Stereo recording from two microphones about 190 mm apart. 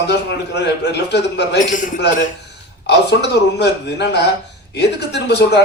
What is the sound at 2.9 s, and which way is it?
A man's voice, 65° left (ahead or behind).